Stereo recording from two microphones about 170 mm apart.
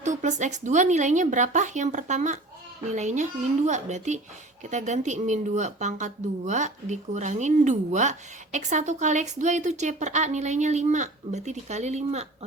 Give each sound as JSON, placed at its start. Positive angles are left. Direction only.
{"t": 0.0, "sound": "speech", "side_deg": -45}